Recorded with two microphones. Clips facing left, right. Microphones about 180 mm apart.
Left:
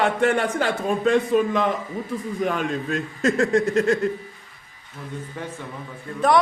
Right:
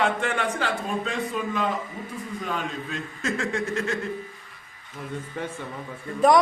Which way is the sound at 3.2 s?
40° left (ahead or behind).